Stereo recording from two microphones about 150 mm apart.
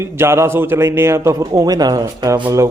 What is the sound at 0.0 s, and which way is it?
A man's voice, 15° right (ahead or behind).